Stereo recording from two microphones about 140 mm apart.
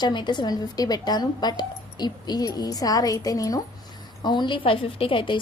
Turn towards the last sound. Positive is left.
turn(degrees=35)  # may be behind; listen again after turning